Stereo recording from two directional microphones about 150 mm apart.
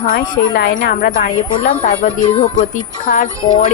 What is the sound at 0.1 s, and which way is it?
A woman's voice, 70° left (ahead or behind).